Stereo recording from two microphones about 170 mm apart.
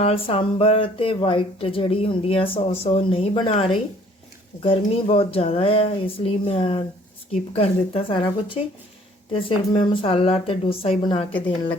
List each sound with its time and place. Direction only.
0.0 s speech: 35° left (ahead or behind)